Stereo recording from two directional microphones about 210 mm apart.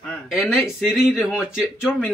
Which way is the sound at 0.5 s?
Centre (ahead or behind).